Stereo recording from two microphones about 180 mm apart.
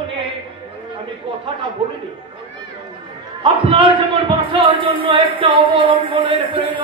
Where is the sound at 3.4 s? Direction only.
30° right (ahead or behind).